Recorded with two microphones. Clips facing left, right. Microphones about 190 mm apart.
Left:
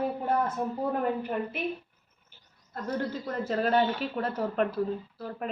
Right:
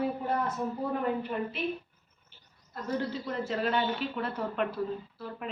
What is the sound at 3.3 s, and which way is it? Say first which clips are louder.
A woman's voice: left 4 dB; 45° left (ahead or behind).